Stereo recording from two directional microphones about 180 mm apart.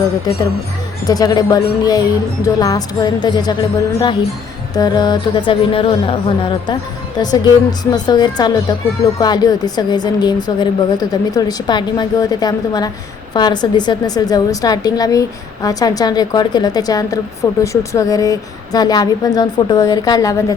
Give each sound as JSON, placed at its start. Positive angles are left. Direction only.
{"t": 1.0, "sound": "a woman's voice", "side_deg": 20}